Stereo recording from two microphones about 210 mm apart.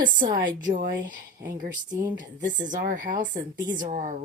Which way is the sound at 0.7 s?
40° right (ahead or behind).